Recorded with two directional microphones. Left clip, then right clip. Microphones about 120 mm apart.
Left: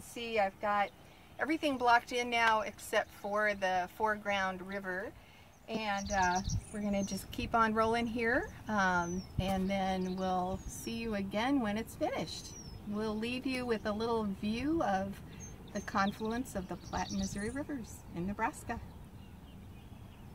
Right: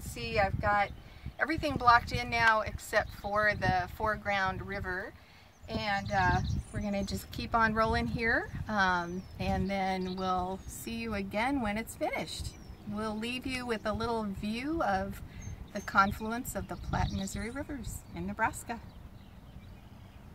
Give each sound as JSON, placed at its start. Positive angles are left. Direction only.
{"t": 0.1, "sound": "speech", "side_deg": 10}
{"t": 1.7, "sound": "speech", "side_deg": 30}
{"t": 13.0, "sound": "speech", "side_deg": 10}
{"t": 18.1, "sound": "speech", "side_deg": 25}